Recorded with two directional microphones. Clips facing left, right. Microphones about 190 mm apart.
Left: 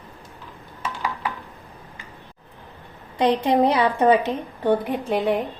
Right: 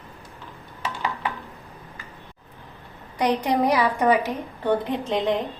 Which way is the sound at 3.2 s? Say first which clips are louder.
Left 3 dB; 25° left (ahead or behind).